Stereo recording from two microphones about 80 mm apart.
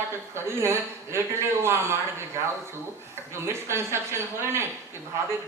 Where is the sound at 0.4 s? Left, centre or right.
Right.